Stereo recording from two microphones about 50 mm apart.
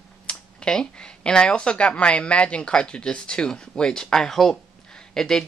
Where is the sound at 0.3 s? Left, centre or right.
Centre.